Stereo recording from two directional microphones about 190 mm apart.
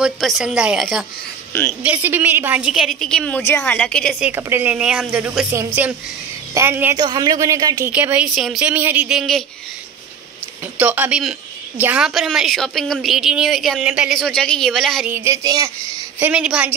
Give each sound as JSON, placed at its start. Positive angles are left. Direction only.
{"t": 0.0, "sound": "a woman's voice", "side_deg": 0}
{"t": 7.9, "sound": "a woman's voice", "side_deg": -5}
{"t": 10.6, "sound": "a woman's voice", "side_deg": -10}
{"t": 15.1, "sound": "a woman's voice", "side_deg": -15}
{"t": 16.2, "sound": "a woman's voice", "side_deg": -5}